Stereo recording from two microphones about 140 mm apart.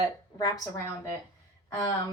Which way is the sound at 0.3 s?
25° left (ahead or behind).